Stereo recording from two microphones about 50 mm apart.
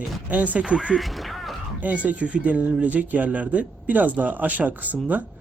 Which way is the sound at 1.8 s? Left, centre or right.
Right.